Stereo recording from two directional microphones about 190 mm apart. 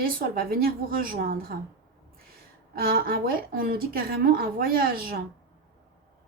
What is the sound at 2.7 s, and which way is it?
Speech, 50° right (ahead or behind).